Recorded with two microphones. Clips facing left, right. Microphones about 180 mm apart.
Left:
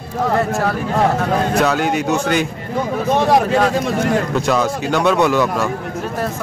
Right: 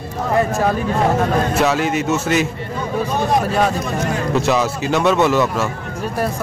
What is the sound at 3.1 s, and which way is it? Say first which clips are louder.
Speech: left 6 dB; 90° left.